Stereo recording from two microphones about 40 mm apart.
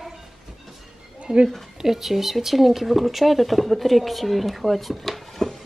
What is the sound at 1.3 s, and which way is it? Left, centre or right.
Speech, right.